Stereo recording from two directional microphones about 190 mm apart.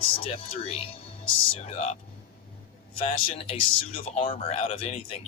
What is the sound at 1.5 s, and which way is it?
Speech, 30° left (ahead or behind).